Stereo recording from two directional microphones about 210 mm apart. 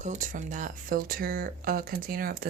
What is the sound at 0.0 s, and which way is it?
Speech, 35° right (ahead or behind).